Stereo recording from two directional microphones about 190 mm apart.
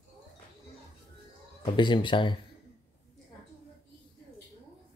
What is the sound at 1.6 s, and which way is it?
Speech, 25° left (ahead or behind).